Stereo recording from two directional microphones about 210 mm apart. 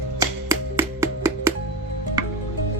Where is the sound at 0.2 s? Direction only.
15° right (ahead or behind).